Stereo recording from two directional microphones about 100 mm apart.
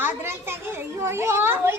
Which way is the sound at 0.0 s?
25° right (ahead or behind).